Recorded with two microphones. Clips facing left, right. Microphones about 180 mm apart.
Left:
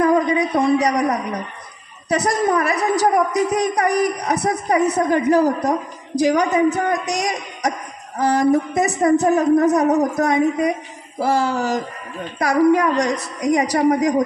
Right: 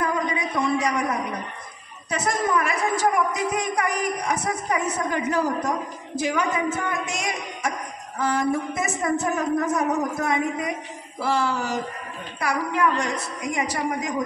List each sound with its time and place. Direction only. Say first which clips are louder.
0.0 s a man's voice: left 9 dB; 40° left (ahead or behind)